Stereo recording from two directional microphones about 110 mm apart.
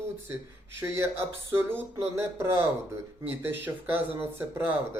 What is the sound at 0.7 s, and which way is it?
Speech, 20° right (ahead or behind).